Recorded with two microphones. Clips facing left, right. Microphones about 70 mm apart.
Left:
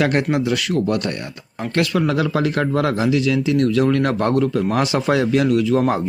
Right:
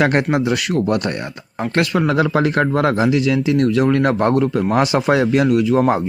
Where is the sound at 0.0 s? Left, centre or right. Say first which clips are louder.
Right 2 dB; right.